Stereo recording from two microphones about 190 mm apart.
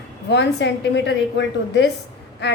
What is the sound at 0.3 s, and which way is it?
A woman's voice, 65° left (ahead or behind).